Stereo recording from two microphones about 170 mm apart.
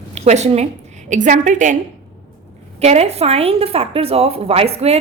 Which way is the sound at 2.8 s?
40° right (ahead or behind).